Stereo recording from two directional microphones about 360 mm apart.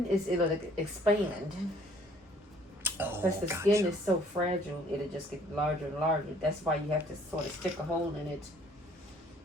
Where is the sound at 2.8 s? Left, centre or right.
Centre.